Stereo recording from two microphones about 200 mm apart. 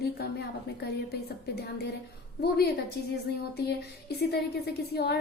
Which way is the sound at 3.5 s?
55° left (ahead or behind).